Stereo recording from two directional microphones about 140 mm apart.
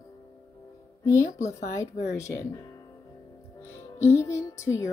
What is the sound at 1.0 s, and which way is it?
Speech, 20° left (ahead or behind).